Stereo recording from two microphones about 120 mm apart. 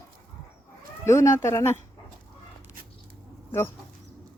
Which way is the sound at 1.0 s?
25° left (ahead or behind).